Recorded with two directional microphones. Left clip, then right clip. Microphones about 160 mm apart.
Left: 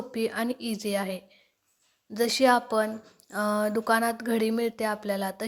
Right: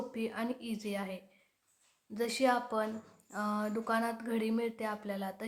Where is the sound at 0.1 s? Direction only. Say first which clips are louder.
Left 8 dB; 40° left (ahead or behind).